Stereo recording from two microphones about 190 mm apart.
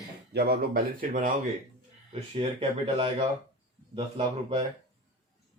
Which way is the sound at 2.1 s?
30° right (ahead or behind).